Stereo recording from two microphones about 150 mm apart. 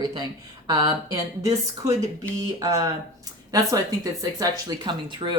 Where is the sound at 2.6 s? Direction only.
25° right (ahead or behind).